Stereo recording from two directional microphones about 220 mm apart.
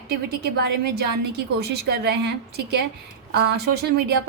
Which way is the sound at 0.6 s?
50° right (ahead or behind).